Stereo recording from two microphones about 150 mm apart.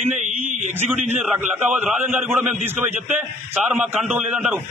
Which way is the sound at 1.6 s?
10° right (ahead or behind).